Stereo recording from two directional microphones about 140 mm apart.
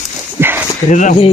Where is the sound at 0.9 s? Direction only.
60° left (ahead or behind).